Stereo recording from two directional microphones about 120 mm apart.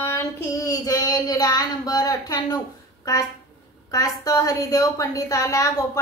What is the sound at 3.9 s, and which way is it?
A woman's voice, 30° left (ahead or behind).